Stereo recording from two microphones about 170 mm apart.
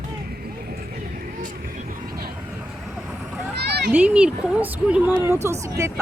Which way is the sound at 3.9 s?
5° right (ahead or behind).